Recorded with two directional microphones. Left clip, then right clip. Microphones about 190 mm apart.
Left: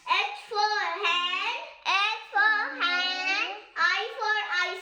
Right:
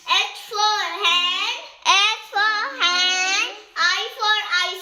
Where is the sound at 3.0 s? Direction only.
65° right (ahead or behind).